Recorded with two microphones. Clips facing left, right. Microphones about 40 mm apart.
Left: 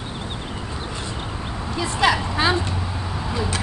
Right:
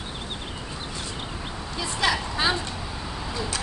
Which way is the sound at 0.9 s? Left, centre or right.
Left.